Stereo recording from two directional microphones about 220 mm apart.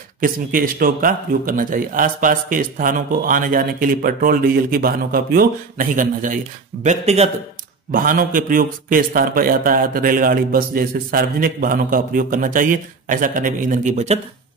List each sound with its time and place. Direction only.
0.2 s a man's voice: 40° right (ahead or behind)